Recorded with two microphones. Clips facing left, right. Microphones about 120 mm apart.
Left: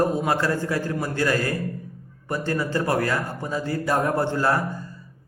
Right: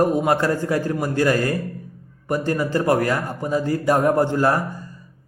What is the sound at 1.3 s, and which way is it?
Speech, 45° right (ahead or behind).